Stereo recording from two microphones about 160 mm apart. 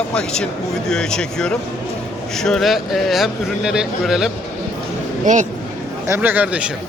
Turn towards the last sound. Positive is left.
turn(degrees=-10)  # may be behind; listen again after turning